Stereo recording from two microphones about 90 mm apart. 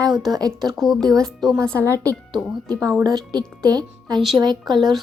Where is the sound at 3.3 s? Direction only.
50° right (ahead or behind).